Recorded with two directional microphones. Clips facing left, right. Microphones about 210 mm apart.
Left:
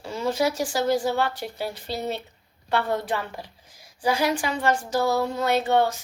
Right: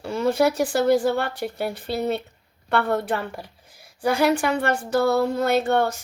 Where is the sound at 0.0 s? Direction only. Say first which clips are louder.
Right 4 dB; 60° right (ahead or behind).